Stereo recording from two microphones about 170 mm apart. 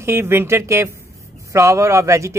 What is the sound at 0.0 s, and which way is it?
Speech, 15° right (ahead or behind).